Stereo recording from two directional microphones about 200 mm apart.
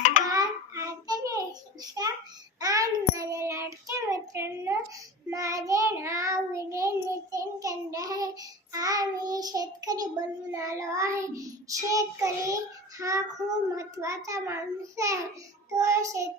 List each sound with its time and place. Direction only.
0.3 s child singing: 15° right (ahead or behind)
13.7 s a child's voice: 15° right (ahead or behind)